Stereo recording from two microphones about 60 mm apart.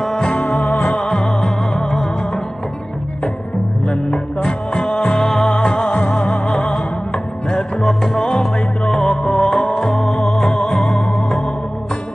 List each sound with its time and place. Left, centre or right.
0.4 s music: left
0.8 s music: centre
3.9 s music: centre